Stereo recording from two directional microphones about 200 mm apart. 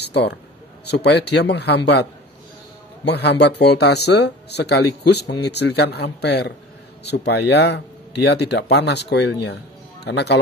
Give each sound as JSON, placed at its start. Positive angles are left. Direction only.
{"t": 0.0, "sound": "a sound", "side_deg": 55}
{"t": 0.8, "sound": "speech", "side_deg": 55}
{"t": 3.1, "sound": "speech", "side_deg": 55}